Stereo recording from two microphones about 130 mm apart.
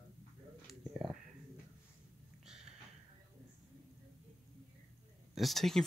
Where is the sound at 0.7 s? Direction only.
Centre (ahead or behind).